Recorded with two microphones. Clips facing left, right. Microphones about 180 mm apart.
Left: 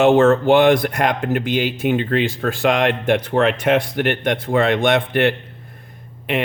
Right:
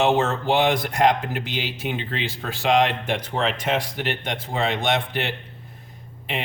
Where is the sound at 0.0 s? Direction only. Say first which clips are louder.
Left 8 dB; 50° left (ahead or behind).